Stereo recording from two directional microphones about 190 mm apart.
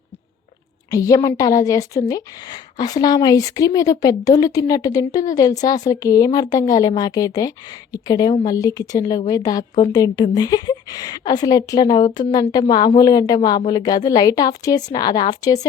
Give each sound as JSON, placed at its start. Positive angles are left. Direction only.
{"t": 0.9, "sound": "a woman's voice", "side_deg": 15}